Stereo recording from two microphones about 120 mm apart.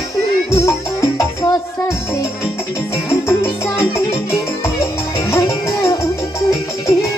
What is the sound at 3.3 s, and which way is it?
Music, 20° left (ahead or behind).